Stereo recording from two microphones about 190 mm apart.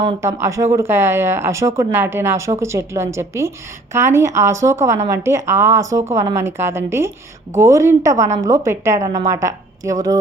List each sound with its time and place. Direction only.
0.0 s speech: 20° right (ahead or behind)